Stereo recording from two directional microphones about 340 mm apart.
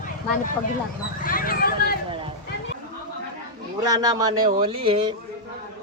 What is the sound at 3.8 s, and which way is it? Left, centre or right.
Speech, centre.